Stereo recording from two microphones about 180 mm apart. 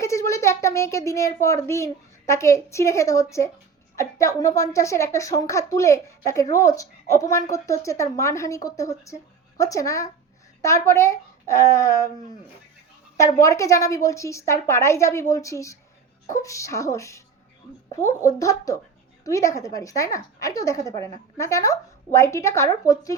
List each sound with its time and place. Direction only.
0.0 s a sound: 15° left (ahead or behind)
1.6 s a woman's voice: 15° left (ahead or behind)
13.1 s a woman's voice: 15° left (ahead or behind)